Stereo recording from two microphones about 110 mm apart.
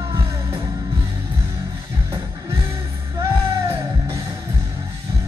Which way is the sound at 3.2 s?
25° right (ahead or behind).